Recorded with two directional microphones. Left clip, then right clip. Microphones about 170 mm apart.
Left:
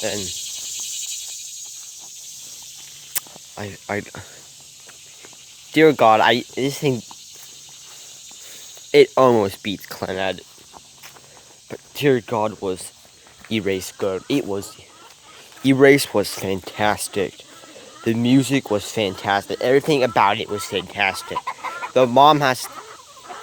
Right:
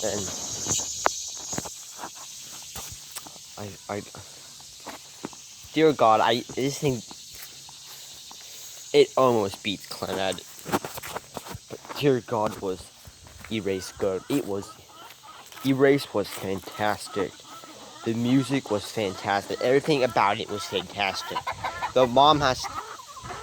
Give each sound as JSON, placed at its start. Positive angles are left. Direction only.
{"t": 3.2, "sound": "snake", "side_deg": 50}
{"t": 5.7, "sound": "speech", "side_deg": 60}
{"t": 6.6, "sound": "speech", "side_deg": 35}
{"t": 8.9, "sound": "speech", "side_deg": 55}
{"t": 11.9, "sound": "speech", "side_deg": 45}
{"t": 13.5, "sound": "speech", "side_deg": 45}
{"t": 15.6, "sound": "speech", "side_deg": 60}
{"t": 21.3, "sound": "speech", "side_deg": -25}
{"t": 21.9, "sound": "speech", "side_deg": 55}
{"t": 22.7, "sound": "chicken", "side_deg": -40}